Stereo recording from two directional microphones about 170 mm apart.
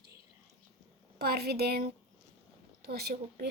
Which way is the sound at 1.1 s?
70° right (ahead or behind).